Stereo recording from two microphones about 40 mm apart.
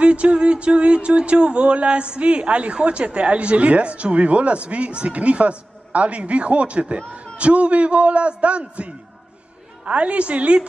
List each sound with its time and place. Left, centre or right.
0.0 s speech: right